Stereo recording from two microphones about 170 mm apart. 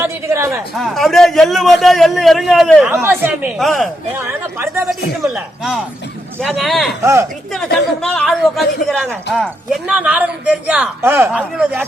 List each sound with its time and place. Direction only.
0.0 s speech: 15° right (ahead or behind)
0.8 s a man's voice: centre (ahead or behind)
3.0 s speech: 10° right (ahead or behind)
3.6 s a man's voice: centre (ahead or behind)
4.1 s speech: 15° right (ahead or behind)
6.4 s a man's voice: centre (ahead or behind)
7.0 s speech: 15° right (ahead or behind)
7.5 s a man's voice: 5° left (ahead or behind)